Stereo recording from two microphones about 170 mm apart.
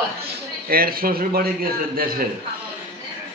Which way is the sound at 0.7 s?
60° right (ahead or behind).